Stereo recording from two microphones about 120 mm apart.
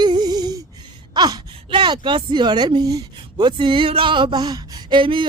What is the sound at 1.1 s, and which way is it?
Speech, 35° right (ahead or behind).